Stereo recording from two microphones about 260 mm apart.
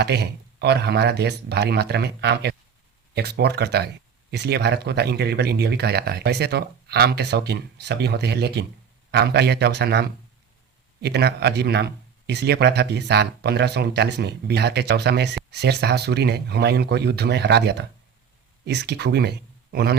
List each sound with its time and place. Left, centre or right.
0.0 s speech: right